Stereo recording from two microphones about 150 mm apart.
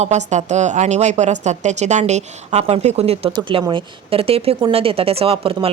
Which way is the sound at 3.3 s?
30° right (ahead or behind).